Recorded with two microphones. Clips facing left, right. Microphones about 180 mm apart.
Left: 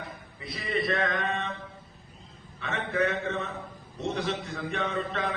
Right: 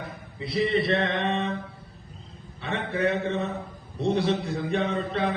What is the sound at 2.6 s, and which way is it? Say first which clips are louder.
Mantra: right 1 dB; 35° right (ahead or behind).